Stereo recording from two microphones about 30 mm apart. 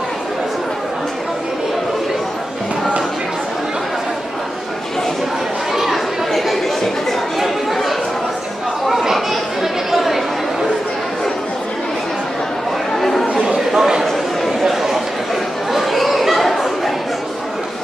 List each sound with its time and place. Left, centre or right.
6.3 s chatter: centre
9.1 s chatter: centre
12.9 s chatter: centre
13.3 s chatter: right
13.7 s a sound: centre
14.6 s chatter: centre